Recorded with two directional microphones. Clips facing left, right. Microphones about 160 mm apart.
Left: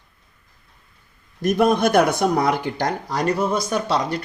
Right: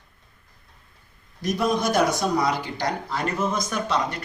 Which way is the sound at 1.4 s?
55° left (ahead or behind).